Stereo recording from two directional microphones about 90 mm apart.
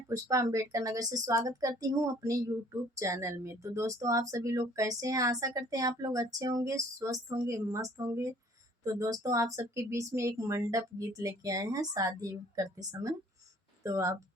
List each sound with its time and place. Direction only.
0.1 s speech: 35° right (ahead or behind)